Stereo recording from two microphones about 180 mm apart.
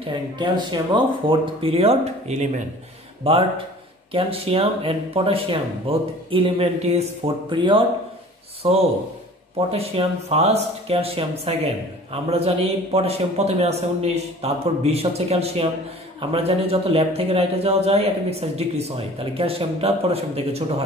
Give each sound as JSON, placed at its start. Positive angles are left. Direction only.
{"t": 0.0, "sound": "speech", "side_deg": -25}
{"t": 3.3, "sound": "speech", "side_deg": -30}